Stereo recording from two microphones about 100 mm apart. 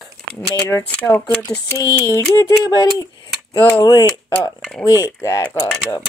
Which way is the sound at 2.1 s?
25° left (ahead or behind).